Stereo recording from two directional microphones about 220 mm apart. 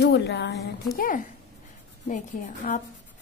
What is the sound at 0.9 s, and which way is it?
A woman's voice, 40° left (ahead or behind).